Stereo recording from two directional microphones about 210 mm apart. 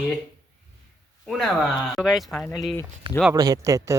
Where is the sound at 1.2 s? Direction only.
Centre (ahead or behind).